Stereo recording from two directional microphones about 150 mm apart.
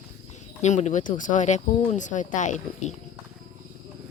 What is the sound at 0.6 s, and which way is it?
Speech, 50° left (ahead or behind).